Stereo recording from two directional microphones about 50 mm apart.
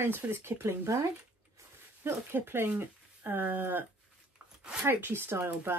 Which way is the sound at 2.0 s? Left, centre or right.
Right.